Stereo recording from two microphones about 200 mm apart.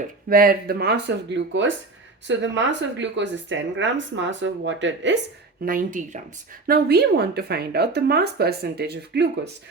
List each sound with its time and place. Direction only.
0.3 s a woman's voice: 45° right (ahead or behind); by 5.2 s 65° right (ahead or behind)
5.6 s a woman's voice: 40° right (ahead or behind)